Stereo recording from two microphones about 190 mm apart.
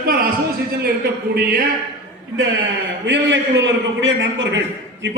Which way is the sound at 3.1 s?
75° right (ahead or behind).